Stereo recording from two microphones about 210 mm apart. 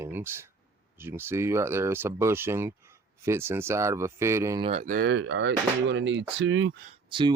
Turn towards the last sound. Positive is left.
turn(degrees=-20)  # may be behind; listen again after turning